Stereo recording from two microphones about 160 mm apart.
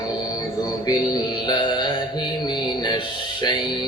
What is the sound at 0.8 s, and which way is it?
Mantra, 25° left (ahead or behind).